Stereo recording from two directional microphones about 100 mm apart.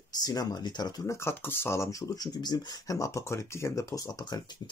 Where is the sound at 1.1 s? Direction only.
25° left (ahead or behind).